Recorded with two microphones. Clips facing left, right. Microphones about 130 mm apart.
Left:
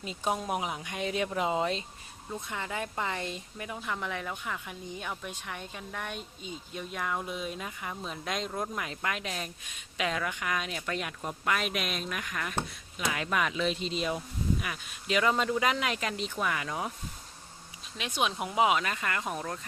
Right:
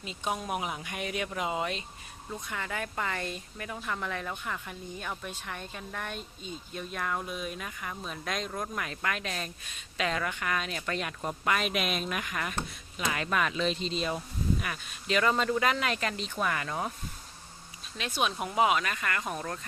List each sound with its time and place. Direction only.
0.0 s speech: 40° left (ahead or behind)
0.3 s speech: 25° left (ahead or behind)
7.3 s speech: 25° left (ahead or behind); by 11.1 s 5° left (ahead or behind)
11.2 s speech: 5° right (ahead or behind)
17.9 s speech: 15° left (ahead or behind)